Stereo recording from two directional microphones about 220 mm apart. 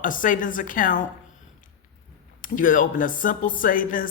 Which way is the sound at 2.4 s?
35° left (ahead or behind).